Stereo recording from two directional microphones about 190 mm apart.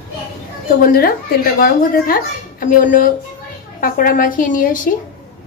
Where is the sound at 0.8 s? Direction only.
50° left (ahead or behind).